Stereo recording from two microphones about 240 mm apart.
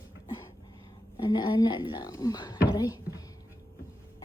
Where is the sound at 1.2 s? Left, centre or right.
Centre.